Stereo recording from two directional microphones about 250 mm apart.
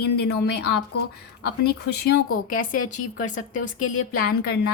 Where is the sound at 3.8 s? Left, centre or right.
Left.